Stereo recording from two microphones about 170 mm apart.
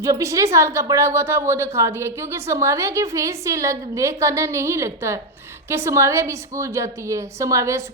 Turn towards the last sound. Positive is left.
turn(degrees=-20)  # may be behind; listen again after turning